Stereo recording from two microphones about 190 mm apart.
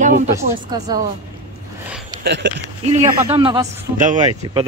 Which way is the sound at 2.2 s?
65° right (ahead or behind).